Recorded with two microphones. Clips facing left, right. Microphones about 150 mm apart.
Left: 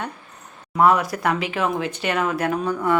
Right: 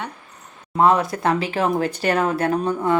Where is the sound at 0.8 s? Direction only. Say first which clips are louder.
Right 1 dB; 25° right (ahead or behind).